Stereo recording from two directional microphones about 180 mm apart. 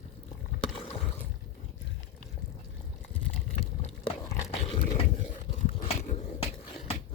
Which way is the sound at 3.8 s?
30° left (ahead or behind).